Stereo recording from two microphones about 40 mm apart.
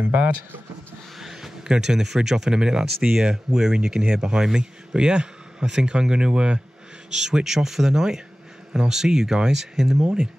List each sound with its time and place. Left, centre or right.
0.0 s speech: right
1.2 s speech: centre